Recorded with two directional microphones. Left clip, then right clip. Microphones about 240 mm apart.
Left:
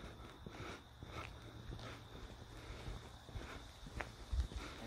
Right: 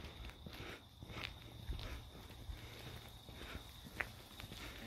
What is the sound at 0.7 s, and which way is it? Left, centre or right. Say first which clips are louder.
Walk: left 1 dB; centre.